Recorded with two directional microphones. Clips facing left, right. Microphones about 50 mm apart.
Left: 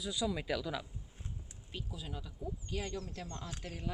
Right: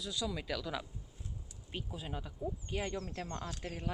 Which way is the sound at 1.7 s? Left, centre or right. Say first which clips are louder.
Right 2 dB; right.